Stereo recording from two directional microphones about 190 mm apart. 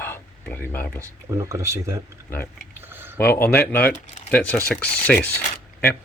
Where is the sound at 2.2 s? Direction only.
10° left (ahead or behind).